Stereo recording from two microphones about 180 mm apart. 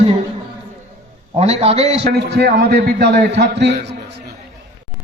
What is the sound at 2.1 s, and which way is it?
A man's voice, 60° right (ahead or behind).